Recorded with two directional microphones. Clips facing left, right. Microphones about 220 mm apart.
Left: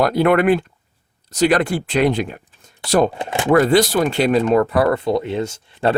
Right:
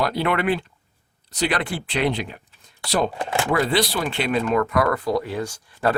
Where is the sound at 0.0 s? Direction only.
50° left (ahead or behind).